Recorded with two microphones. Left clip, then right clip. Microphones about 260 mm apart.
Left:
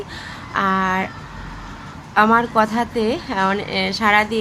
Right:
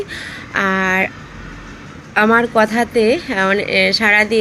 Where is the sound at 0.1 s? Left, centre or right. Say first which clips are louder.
Right 3 dB; centre.